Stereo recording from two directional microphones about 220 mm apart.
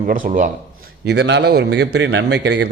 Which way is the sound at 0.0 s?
40° right (ahead or behind).